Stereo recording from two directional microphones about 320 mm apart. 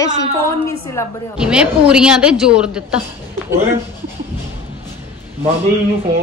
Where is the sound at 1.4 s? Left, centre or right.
Centre.